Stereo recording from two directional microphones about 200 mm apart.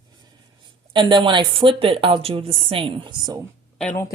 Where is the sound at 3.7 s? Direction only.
10° left (ahead or behind).